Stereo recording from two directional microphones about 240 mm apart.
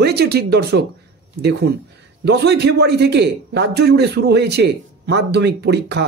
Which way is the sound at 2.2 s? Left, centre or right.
Right.